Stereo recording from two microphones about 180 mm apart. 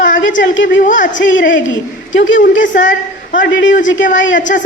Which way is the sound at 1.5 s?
90° left.